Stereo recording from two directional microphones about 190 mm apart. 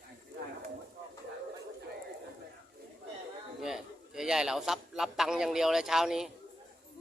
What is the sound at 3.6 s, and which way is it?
A man's voice, 5° right (ahead or behind).